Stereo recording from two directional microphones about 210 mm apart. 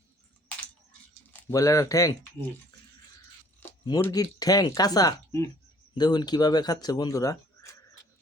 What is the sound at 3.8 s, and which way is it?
Speech, 20° left (ahead or behind).